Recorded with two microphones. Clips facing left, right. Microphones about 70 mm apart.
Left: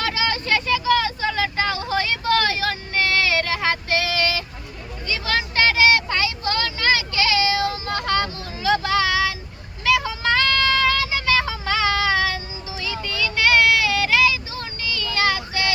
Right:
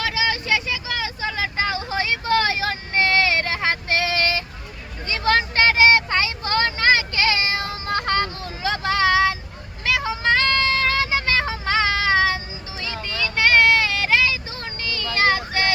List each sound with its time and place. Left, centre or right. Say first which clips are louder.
0.0 s vehicle: even; centre; by 9.3 s right
10.0 s child singing: right 1 dB; right